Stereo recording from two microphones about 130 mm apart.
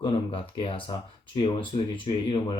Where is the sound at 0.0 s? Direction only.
45° left (ahead or behind).